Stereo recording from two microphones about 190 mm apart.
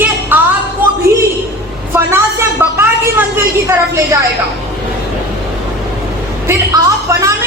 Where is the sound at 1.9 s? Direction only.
15° right (ahead or behind).